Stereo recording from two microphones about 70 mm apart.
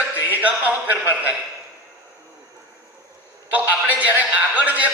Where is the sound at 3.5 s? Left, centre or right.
Right.